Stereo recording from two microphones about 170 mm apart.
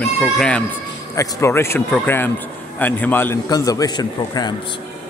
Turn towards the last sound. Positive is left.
turn(degrees=25)  # may be behind; listen again after turning